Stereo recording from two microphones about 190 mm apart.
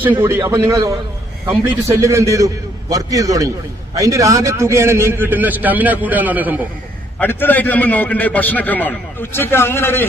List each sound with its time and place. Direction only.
0.0 s a man's voice: 10° right (ahead or behind)
7.2 s a man's voice: 10° left (ahead or behind)